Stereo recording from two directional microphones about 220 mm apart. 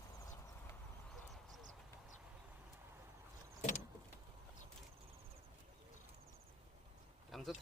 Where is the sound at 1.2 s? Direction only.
Centre (ahead or behind).